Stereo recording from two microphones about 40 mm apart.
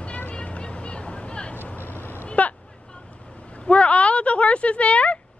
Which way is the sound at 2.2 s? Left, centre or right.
Left.